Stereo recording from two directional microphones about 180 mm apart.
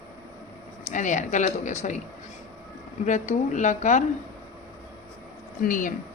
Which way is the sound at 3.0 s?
40° left (ahead or behind).